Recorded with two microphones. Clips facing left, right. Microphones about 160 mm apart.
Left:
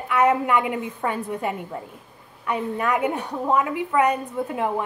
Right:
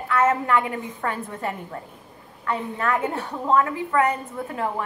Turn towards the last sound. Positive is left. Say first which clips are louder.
# left 3 dB
turn(degrees=20)  # may be behind; listen again after turning